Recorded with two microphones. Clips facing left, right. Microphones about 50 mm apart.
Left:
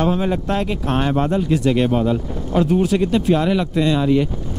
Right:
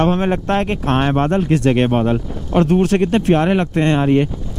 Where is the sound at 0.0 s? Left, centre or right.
Right.